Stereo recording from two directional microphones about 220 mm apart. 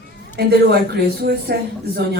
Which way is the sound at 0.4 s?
50° right (ahead or behind).